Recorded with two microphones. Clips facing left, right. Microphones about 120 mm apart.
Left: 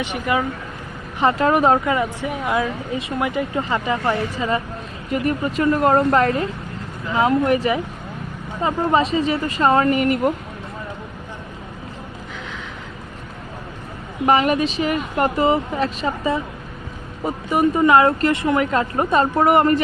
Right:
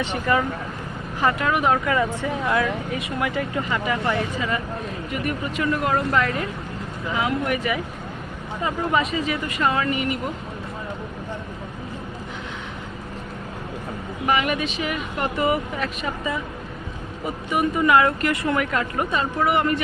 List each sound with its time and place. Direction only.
0.0 s speech: 15° left (ahead or behind)
1.2 s speech: 30° left (ahead or behind)
1.8 s speech: 20° left (ahead or behind); by 10.2 s 45° left (ahead or behind)
14.3 s speech: 35° left (ahead or behind)
15.4 s speech: 30° left (ahead or behind)